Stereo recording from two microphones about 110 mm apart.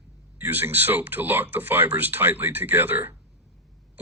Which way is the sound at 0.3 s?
20° right (ahead or behind).